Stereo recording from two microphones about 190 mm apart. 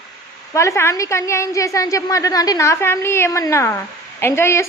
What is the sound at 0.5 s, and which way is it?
Speech, 15° left (ahead or behind).